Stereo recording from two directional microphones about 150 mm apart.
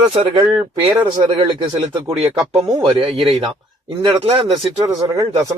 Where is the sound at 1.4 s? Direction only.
35° right (ahead or behind).